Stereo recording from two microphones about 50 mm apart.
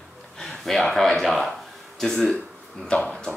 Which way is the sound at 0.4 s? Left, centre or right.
Centre.